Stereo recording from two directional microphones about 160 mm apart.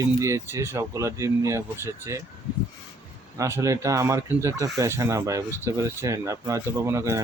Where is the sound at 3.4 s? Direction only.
15° right (ahead or behind).